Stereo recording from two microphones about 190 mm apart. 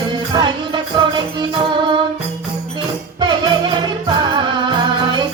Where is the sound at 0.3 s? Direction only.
25° right (ahead or behind).